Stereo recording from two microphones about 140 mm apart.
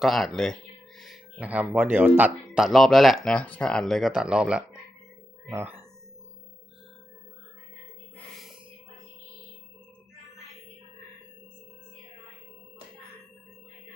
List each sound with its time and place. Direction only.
0.0 s speech: centre (ahead or behind)
2.6 s speech: centre (ahead or behind)
5.5 s speech: 20° right (ahead or behind)